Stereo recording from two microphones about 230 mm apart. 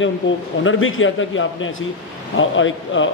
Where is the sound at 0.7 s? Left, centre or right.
Left.